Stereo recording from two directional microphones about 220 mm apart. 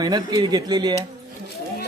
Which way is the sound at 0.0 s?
20° right (ahead or behind).